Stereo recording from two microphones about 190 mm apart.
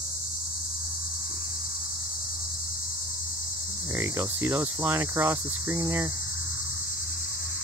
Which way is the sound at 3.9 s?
15° right (ahead or behind).